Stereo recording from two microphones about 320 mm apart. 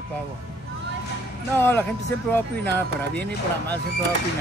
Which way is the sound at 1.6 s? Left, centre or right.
Centre.